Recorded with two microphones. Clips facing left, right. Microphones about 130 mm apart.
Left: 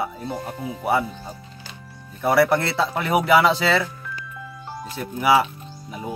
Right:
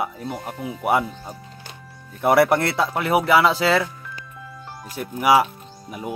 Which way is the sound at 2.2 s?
20° right (ahead or behind).